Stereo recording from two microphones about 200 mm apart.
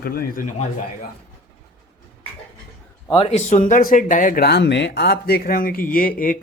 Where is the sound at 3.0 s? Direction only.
25° left (ahead or behind).